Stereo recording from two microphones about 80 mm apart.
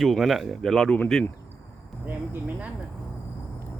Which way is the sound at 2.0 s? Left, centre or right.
Right.